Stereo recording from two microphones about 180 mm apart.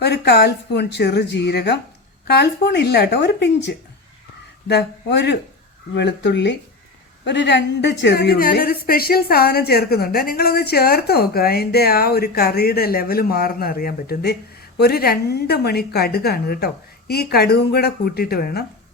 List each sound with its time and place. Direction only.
0.0 s a woman's voice: 65° left (ahead or behind)